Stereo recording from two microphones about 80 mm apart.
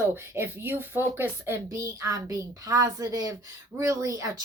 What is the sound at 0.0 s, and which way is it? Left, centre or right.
A woman's voice, right.